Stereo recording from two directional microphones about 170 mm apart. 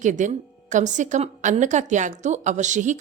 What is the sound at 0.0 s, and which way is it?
Speech, 45° right (ahead or behind).